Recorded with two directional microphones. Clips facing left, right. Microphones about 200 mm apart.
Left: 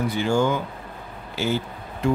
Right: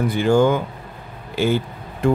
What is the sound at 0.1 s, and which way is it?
Speech, 55° right (ahead or behind).